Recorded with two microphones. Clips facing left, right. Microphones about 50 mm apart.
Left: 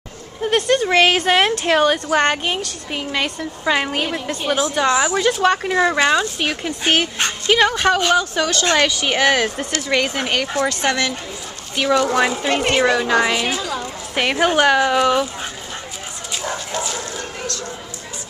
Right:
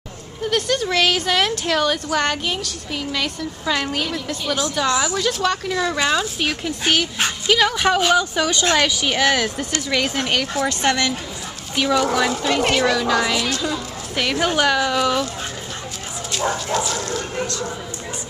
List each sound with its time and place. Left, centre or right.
0.4 s speech: left
4.6 s speech: centre
6.2 s speech: centre
7.7 s speech: centre
9.0 s speech: centre
12.4 s speech: left
16.7 s bow-wow: centre